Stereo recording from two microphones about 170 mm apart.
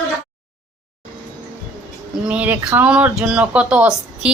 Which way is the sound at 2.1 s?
5° right (ahead or behind).